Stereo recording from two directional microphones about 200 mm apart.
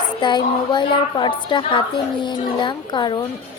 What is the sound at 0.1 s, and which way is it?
Speech, 20° left (ahead or behind).